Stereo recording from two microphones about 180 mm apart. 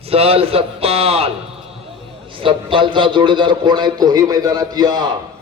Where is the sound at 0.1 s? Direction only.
30° right (ahead or behind).